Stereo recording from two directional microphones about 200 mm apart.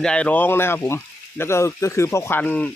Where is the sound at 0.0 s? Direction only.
5° left (ahead or behind).